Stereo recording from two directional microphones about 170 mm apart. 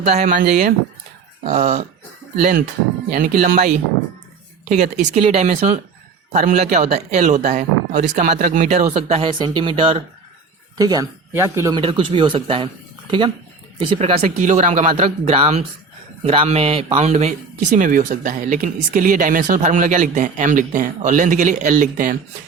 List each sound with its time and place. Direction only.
0.0 s speech: 40° right (ahead or behind)
2.4 s speech: 50° right (ahead or behind)
4.7 s speech: 45° right (ahead or behind); by 11.8 s 15° right (ahead or behind)
11.8 s speech: 30° right (ahead or behind); by 22.1 s 50° right (ahead or behind)